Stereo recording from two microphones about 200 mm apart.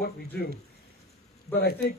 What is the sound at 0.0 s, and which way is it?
A man's voice, 50° left (ahead or behind).